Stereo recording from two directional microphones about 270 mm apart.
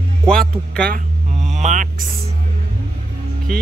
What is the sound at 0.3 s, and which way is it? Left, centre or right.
Speech, centre.